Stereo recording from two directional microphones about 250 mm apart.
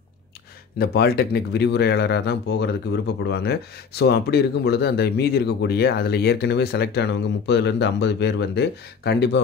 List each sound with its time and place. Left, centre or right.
0.7 s speech: left